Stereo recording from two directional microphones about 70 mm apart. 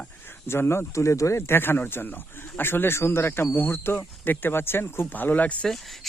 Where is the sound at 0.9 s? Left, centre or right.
Left.